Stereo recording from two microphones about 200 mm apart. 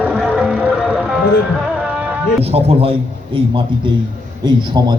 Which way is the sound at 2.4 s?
30° right (ahead or behind).